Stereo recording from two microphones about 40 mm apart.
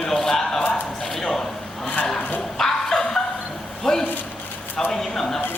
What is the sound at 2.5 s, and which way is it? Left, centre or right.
Dog, centre.